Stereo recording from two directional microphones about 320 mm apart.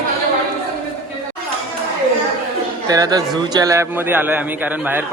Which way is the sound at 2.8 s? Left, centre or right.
Centre.